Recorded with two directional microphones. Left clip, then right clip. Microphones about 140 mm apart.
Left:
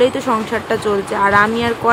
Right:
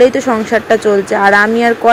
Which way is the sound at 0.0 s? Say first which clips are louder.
Right 5 dB; 25° right (ahead or behind).